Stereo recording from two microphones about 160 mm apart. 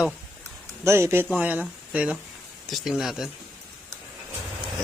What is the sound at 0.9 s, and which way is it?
Speech, 15° right (ahead or behind).